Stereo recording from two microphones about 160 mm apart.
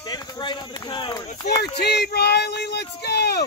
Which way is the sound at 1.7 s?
90° left.